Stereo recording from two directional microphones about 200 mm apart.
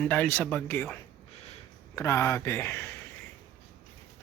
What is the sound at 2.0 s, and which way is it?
Speech, 15° left (ahead or behind).